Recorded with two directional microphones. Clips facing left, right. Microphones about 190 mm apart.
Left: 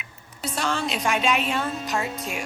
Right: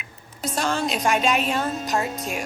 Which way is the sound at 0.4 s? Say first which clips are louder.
Right 2 dB; 45° right (ahead or behind).